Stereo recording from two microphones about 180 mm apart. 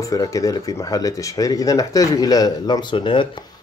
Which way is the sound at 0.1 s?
20° left (ahead or behind).